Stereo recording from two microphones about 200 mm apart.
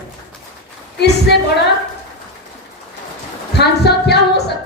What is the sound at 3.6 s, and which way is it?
Music, 55° left (ahead or behind).